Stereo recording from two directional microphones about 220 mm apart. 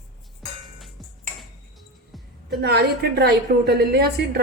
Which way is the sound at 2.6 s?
50° right (ahead or behind).